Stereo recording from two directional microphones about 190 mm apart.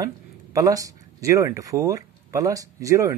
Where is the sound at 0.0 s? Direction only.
15° right (ahead or behind).